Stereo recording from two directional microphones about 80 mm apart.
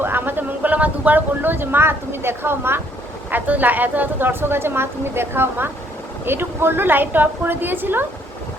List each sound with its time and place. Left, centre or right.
0.0 s a woman's voice: right